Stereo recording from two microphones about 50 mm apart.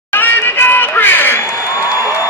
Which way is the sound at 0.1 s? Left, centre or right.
Left.